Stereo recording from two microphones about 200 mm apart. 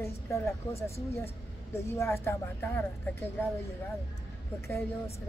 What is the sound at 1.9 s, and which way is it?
Speech, 15° left (ahead or behind).